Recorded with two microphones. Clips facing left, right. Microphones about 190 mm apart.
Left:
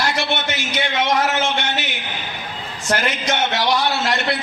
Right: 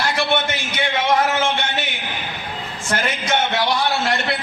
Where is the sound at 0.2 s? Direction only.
55° right (ahead or behind).